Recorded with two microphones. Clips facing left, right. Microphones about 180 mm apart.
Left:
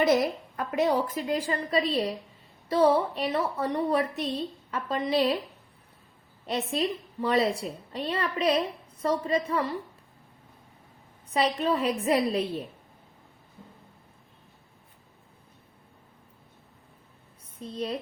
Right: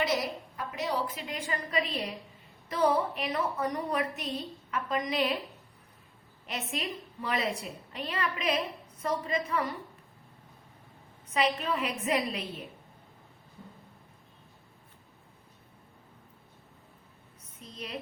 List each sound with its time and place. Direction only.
0.0 s a woman's voice: 50° left (ahead or behind); by 5.4 s 30° left (ahead or behind)
6.4 s a woman's voice: 30° left (ahead or behind)
11.3 s a woman's voice: 35° left (ahead or behind)
17.6 s a woman's voice: 30° left (ahead or behind)